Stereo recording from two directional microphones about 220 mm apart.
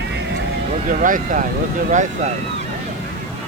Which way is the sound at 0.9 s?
35° right (ahead or behind).